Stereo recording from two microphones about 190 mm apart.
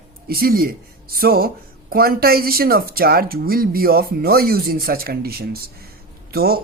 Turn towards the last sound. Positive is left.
turn(degrees=-55)  # may be behind; listen again after turning